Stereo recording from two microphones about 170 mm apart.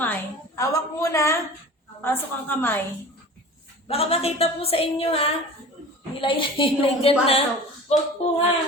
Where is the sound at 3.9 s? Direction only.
35° left (ahead or behind).